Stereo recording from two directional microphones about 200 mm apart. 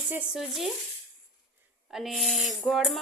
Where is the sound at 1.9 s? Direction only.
Centre (ahead or behind).